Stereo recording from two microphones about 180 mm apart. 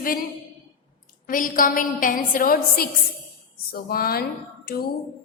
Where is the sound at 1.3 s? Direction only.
50° left (ahead or behind).